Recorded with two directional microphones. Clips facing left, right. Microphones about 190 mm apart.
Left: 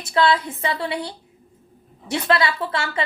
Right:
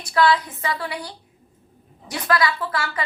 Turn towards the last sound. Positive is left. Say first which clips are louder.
# left 2 dB
turn(degrees=25)  # may be behind; listen again after turning